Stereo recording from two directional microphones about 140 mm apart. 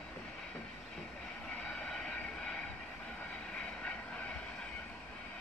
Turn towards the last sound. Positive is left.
turn(degrees=10)  # may be behind; listen again after turning